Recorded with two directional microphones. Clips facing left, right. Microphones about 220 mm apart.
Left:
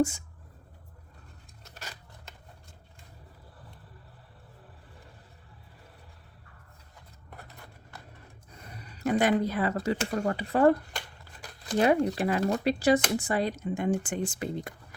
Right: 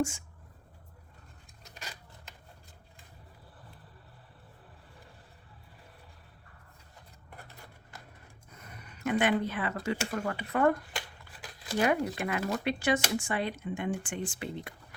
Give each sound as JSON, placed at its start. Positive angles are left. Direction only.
{"t": 8.5, "sound": "speech", "side_deg": 35}
{"t": 11.8, "sound": "speech", "side_deg": 35}